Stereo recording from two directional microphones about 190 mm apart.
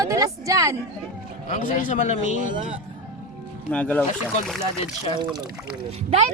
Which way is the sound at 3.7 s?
10° left (ahead or behind).